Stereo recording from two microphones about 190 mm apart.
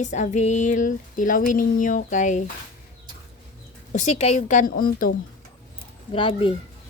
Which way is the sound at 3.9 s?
35° left (ahead or behind).